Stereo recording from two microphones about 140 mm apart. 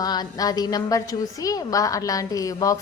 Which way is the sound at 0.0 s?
30° left (ahead or behind).